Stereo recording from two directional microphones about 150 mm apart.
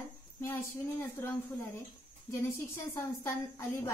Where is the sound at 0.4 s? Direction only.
15° left (ahead or behind).